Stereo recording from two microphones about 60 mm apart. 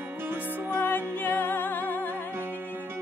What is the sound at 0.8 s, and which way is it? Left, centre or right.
Music, left.